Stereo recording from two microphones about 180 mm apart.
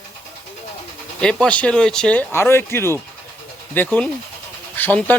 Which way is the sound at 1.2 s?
5° left (ahead or behind).